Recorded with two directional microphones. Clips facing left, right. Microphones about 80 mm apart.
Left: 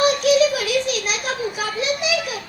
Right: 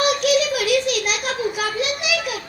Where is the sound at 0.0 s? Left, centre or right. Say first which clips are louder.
Left 3 dB; left.